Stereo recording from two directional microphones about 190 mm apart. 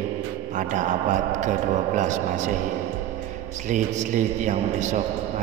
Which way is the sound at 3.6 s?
40° right (ahead or behind).